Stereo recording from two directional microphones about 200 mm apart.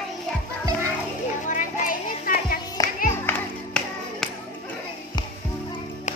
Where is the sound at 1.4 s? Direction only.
40° left (ahead or behind).